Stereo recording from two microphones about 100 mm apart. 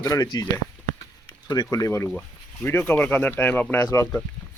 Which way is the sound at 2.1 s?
10° left (ahead or behind).